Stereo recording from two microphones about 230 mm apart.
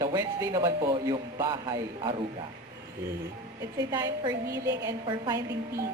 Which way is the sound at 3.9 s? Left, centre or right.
Centre.